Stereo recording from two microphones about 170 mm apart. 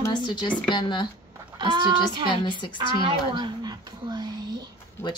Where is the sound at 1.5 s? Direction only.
30° right (ahead or behind).